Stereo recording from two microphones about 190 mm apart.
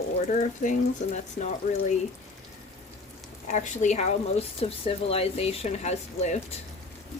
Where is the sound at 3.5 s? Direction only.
40° left (ahead or behind).